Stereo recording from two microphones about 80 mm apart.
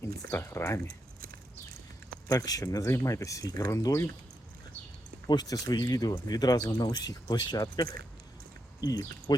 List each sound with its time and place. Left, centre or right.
0.0 s speech: left
2.3 s speech: left
5.3 s speech: left